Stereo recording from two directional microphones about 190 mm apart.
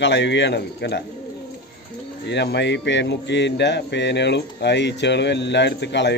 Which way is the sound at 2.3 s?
65° left (ahead or behind).